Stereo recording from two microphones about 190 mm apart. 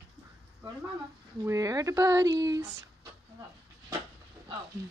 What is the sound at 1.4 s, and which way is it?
Speech, 15° right (ahead or behind).